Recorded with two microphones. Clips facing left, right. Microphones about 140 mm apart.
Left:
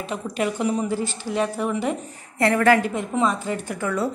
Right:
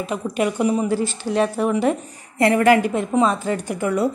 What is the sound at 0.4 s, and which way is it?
Speech, 10° right (ahead or behind).